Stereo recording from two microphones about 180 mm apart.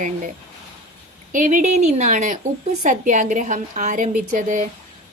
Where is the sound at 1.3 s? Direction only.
45° right (ahead or behind).